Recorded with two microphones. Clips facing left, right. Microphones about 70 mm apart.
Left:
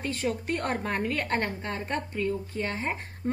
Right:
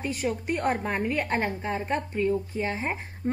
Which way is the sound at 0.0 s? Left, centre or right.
Centre.